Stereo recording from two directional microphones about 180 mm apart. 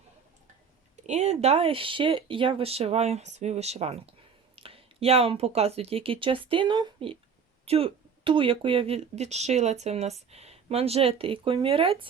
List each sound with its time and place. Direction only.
1.0 s speech: 40° right (ahead or behind)